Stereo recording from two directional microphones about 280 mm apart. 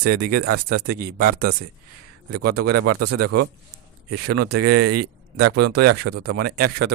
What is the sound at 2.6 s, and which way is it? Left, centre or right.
Speech, right.